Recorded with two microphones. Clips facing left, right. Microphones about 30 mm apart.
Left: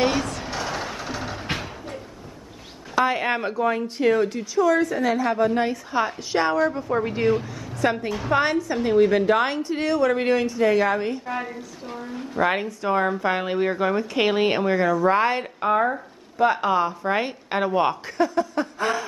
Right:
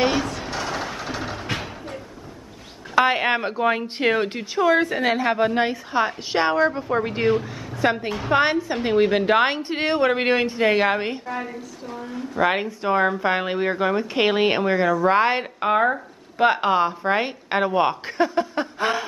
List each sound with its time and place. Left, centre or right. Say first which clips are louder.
0.0 s a sound: right 1 dB; centre
3.0 s speech: right 3 dB; right
3.6 s a woman's voice: left 1 dB; right
12.1 s speech: right 1 dB; centre
15.0 s speech: right 1 dB; right
17.1 s speech: right 2 dB; centre
18.0 s speech: right 1 dB; right